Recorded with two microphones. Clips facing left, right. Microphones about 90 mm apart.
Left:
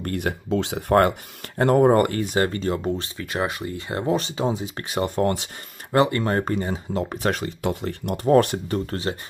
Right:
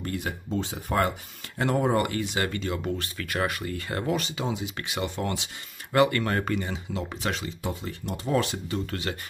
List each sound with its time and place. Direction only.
0.0 s speech: 60° left (ahead or behind)
1.6 s speech: 45° left (ahead or behind)
5.9 s speech: 30° left (ahead or behind); by 8.8 s 50° left (ahead or behind)
9.1 s speech: 30° left (ahead or behind)